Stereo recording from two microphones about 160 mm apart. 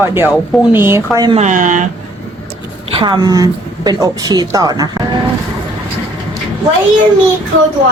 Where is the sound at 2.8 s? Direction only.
30° right (ahead or behind).